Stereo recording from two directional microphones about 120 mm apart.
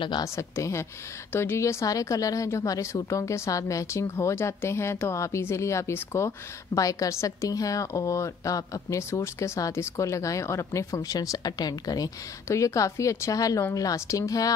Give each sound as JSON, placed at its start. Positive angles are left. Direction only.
{"t": 0.2, "sound": "a woman's voice", "side_deg": 25}